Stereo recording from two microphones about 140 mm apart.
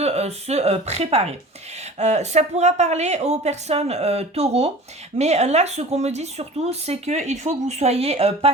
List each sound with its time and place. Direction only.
0.0 s speech: 50° right (ahead or behind)